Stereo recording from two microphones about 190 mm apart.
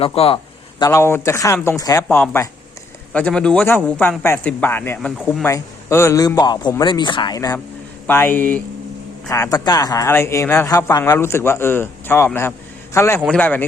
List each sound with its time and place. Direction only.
0.0 s a man's voice: 30° left (ahead or behind)
0.8 s a man's voice: 15° left (ahead or behind)